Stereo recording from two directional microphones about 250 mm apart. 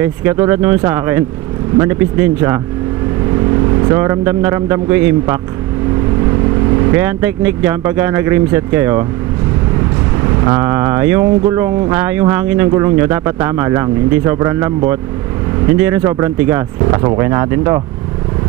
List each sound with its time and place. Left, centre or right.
0.0 s speech: centre
3.9 s speech: centre
6.8 s speech: centre
10.4 s speech: centre